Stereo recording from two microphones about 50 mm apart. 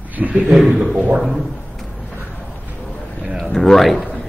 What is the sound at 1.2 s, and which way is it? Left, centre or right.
Speech, centre.